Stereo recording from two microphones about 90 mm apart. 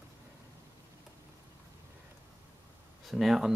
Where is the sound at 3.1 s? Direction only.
5° right (ahead or behind).